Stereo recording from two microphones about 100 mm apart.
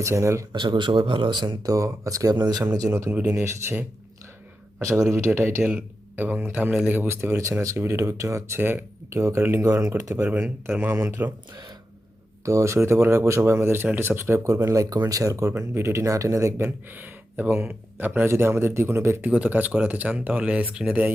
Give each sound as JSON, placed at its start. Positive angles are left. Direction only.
{"t": 0.0, "sound": "speech", "side_deg": -30}
{"t": 0.5, "sound": "a man's voice", "side_deg": -50}
{"t": 4.8, "sound": "a man's voice", "side_deg": -30}
{"t": 5.6, "sound": "a man's voice", "side_deg": -15}
{"t": 10.2, "sound": "speech", "side_deg": -20}
{"t": 12.5, "sound": "speech", "side_deg": -30}